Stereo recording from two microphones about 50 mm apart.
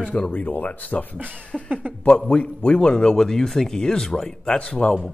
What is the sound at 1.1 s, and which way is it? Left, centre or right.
Speech, right.